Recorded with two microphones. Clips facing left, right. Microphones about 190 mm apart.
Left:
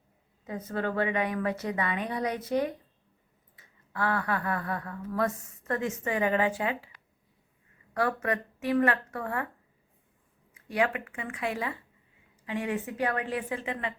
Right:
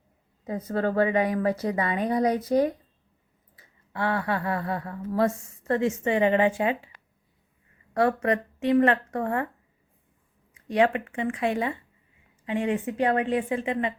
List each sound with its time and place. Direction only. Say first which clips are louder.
0.4 s a woman's voice: right 5 dB; 35° right (ahead or behind)
7.9 s speech: right 6 dB; 30° right (ahead or behind)
10.5 s speech: right 6 dB; 30° right (ahead or behind)